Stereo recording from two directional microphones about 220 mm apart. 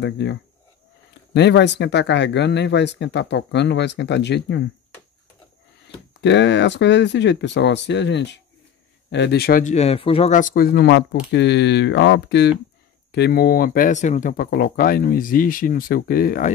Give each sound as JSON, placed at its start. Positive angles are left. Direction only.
{"t": 0.0, "sound": "speech", "side_deg": 50}
{"t": 6.2, "sound": "speech", "side_deg": 55}